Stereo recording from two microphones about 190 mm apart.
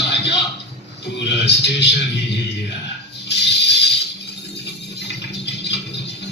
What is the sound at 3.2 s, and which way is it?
Music, 65° left (ahead or behind).